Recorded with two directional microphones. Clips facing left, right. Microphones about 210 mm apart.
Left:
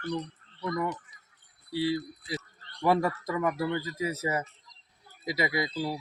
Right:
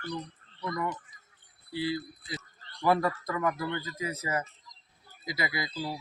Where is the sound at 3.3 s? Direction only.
25° left (ahead or behind).